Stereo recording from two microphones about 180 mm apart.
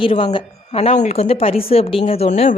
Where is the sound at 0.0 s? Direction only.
30° left (ahead or behind).